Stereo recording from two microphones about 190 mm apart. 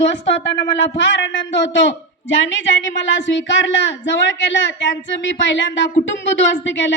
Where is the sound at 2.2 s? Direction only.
75° left (ahead or behind).